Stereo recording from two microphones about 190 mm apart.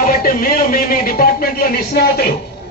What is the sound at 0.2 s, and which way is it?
A man's voice, 50° left (ahead or behind).